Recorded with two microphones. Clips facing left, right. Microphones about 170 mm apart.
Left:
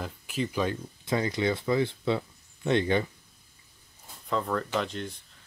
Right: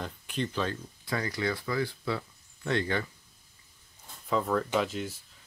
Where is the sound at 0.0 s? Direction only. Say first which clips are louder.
Left 2 dB; 5° left (ahead or behind); by 3.1 s 20° left (ahead or behind).